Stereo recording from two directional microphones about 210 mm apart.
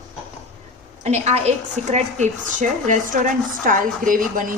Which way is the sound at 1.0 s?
30° right (ahead or behind).